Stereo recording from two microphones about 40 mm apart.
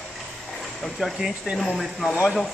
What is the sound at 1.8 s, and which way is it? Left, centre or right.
Speech, centre.